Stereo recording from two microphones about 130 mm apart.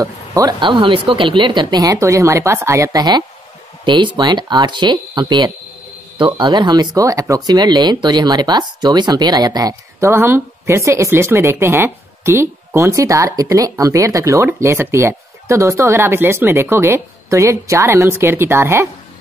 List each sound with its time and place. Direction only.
0.0 s speech: 25° right (ahead or behind)